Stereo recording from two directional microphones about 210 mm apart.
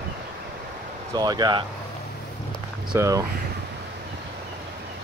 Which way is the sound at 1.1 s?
20° right (ahead or behind).